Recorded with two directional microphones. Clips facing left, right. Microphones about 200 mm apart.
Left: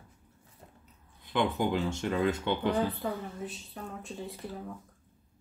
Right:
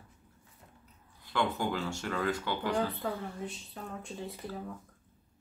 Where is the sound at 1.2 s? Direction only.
20° left (ahead or behind).